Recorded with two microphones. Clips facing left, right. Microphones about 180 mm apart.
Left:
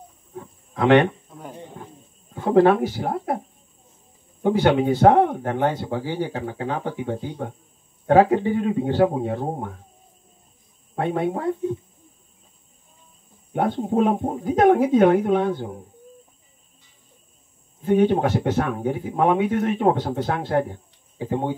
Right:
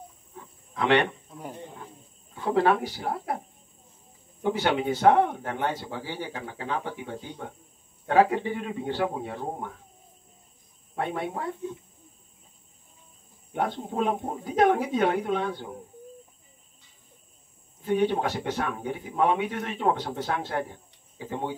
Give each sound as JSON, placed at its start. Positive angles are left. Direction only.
{"t": 0.4, "sound": "wild animals", "side_deg": 45}
{"t": 2.3, "sound": "speech", "side_deg": 45}
{"t": 4.4, "sound": "speech", "side_deg": 45}
{"t": 11.0, "sound": "speech", "side_deg": 45}
{"t": 13.5, "sound": "speech", "side_deg": 45}
{"t": 17.8, "sound": "speech", "side_deg": 45}